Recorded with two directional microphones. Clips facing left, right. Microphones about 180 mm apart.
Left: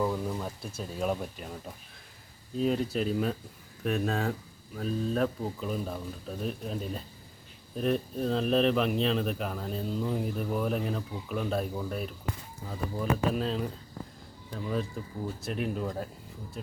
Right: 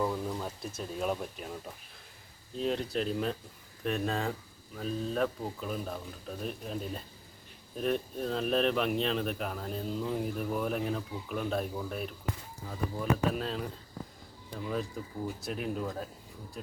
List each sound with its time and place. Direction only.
0.0 s speech: centre (ahead or behind)
2.6 s speech: 5° left (ahead or behind)